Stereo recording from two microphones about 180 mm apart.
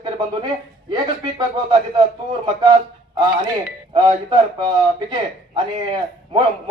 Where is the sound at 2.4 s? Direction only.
25° right (ahead or behind).